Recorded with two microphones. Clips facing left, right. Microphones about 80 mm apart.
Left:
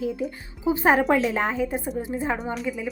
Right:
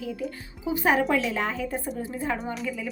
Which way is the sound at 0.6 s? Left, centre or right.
Left.